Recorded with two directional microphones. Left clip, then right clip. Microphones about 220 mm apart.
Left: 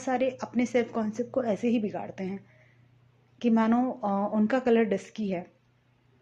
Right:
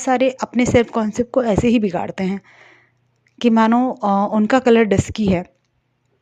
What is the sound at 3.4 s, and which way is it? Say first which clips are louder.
Speech: right 11 dB; 45° right (ahead or behind).